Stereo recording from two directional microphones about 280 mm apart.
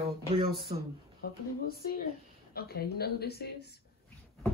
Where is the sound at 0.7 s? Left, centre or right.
Centre.